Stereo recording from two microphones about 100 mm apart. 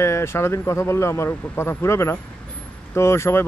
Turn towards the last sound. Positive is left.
turn(degrees=25)  # may be behind; listen again after turning